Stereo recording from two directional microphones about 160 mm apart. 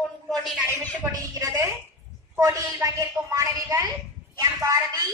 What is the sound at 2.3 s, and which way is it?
A woman's voice, 20° right (ahead or behind).